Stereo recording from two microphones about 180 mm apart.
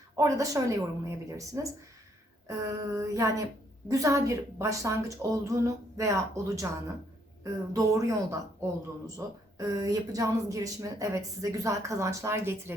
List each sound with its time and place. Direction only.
0.2 s a woman's voice: 20° right (ahead or behind)